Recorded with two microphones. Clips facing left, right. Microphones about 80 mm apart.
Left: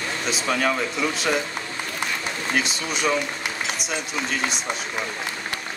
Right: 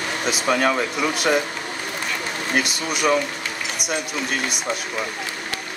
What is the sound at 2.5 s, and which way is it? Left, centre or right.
Speech, right.